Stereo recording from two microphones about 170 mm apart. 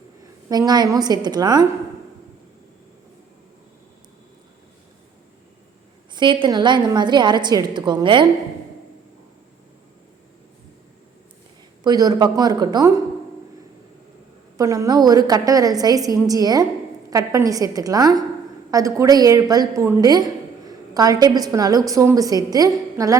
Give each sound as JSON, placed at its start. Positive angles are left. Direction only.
{"t": 0.4, "sound": "a woman's voice", "side_deg": -25}
{"t": 6.1, "sound": "a woman's voice", "side_deg": -25}
{"t": 11.8, "sound": "a woman's voice", "side_deg": -25}
{"t": 14.6, "sound": "a woman's voice", "side_deg": -20}